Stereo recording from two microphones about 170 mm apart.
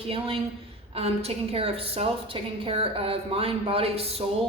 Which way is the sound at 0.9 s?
35° right (ahead or behind).